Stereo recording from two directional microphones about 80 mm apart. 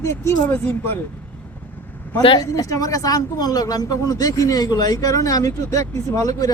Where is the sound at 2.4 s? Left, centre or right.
Left.